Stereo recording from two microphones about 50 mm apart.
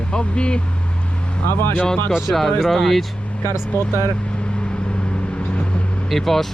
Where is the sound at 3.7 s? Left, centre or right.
Left.